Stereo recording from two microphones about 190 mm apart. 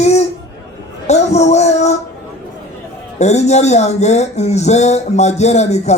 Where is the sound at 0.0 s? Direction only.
35° left (ahead or behind).